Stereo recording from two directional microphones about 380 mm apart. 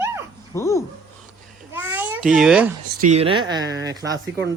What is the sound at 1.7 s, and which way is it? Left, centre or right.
Babbling, centre.